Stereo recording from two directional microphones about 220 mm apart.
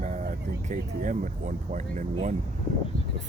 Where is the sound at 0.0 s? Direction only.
35° right (ahead or behind).